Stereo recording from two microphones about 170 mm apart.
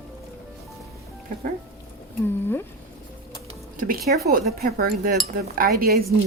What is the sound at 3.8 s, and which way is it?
A woman's voice, 60° right (ahead or behind).